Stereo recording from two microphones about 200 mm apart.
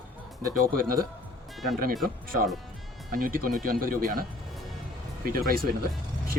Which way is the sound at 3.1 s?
45° right (ahead or behind).